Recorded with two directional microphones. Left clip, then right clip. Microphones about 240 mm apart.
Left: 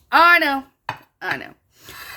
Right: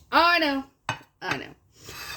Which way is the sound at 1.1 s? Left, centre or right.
Left.